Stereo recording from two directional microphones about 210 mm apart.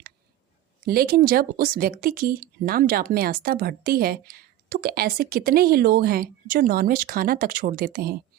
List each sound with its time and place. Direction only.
0.9 s speech: 45° right (ahead or behind)